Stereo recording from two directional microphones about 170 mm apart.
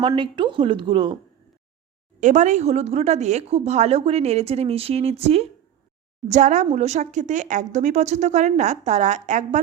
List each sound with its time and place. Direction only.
0.1 s a woman's voice: 25° right (ahead or behind)
2.2 s a woman's voice: 45° right (ahead or behind)